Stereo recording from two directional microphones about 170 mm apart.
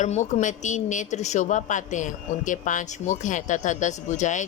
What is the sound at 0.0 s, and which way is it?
A woman's voice, 45° left (ahead or behind).